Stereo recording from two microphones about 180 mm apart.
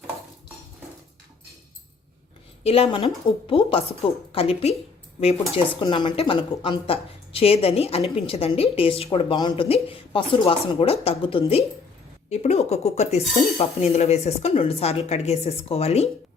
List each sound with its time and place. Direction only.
2.6 s speech: 30° left (ahead or behind)